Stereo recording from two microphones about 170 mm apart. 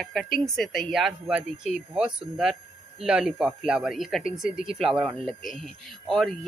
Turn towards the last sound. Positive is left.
turn(degrees=0)  # may be behind; listen again after turning